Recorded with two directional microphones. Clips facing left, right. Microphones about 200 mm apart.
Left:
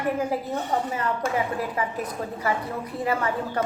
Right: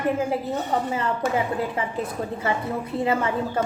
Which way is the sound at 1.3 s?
25° right (ahead or behind).